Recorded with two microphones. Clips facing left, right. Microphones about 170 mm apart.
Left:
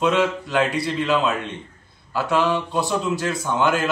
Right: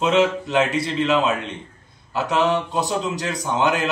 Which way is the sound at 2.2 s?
20° right (ahead or behind).